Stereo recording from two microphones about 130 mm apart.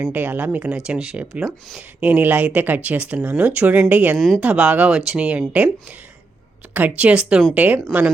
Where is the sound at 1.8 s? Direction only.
15° right (ahead or behind).